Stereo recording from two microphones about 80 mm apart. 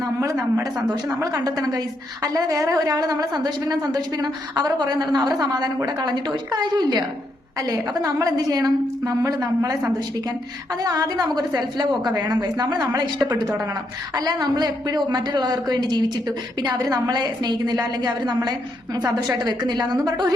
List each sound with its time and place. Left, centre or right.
1.2 s a woman's voice: right
7.6 s a woman's voice: right
10.8 s a woman's voice: right